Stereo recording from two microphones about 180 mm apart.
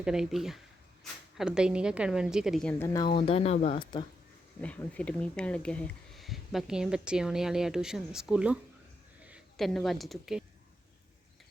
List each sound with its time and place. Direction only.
0.0 s speech: 5° right (ahead or behind)
2.8 s speech: 20° left (ahead or behind); by 3.8 s 40° left (ahead or behind)
4.6 s speech: 5° left (ahead or behind)